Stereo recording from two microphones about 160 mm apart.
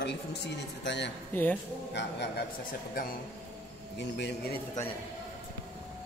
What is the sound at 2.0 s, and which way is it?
Speech, 90° left.